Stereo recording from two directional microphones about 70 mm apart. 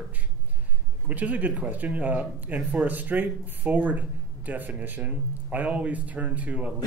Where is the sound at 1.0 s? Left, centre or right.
Right.